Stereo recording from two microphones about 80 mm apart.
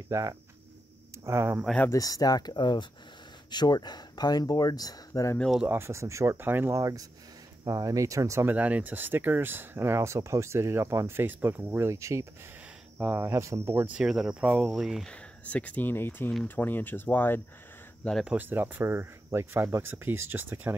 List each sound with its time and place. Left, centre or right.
0.1 s speech: right
1.2 s speech: right
1.9 s speech: left
5.7 s speech: right
6.8 s speech: right
8.5 s speech: centre
14.0 s speech: centre
15.0 s speech: centre
18.4 s speech: right